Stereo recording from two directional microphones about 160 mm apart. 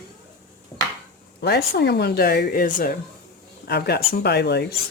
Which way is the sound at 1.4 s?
90° left.